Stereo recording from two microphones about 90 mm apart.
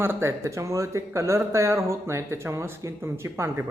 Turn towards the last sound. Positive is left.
turn(degrees=-30)  # may be behind; listen again after turning